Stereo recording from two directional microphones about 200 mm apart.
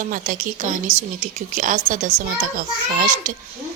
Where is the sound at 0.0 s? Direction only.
40° right (ahead or behind).